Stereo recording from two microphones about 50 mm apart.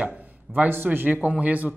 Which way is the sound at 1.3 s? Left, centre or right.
Right.